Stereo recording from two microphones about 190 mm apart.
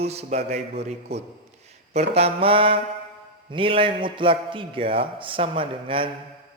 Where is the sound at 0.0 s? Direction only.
35° right (ahead or behind).